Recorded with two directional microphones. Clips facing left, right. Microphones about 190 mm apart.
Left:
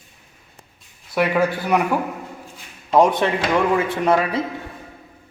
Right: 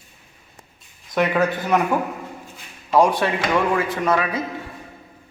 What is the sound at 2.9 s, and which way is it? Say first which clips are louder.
A man's voice: left 1 dB; 20° left (ahead or behind).